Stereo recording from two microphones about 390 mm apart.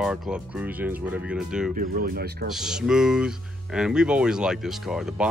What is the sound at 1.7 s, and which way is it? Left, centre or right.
Speech, right.